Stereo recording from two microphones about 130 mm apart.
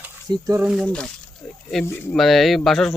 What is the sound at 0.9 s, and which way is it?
Speech, 5° left (ahead or behind).